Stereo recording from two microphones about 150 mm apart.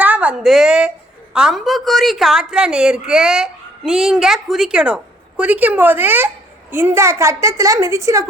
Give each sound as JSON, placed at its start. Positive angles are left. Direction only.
{"t": 0.0, "sound": "a woman's voice", "side_deg": -10}